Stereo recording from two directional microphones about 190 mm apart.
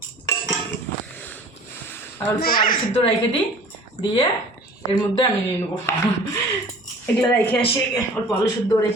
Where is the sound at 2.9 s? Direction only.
30° left (ahead or behind).